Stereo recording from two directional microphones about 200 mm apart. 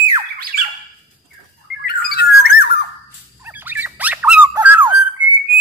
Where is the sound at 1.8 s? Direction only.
50° left (ahead or behind).